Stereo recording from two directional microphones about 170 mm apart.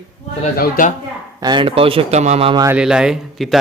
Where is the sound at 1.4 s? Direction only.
25° right (ahead or behind).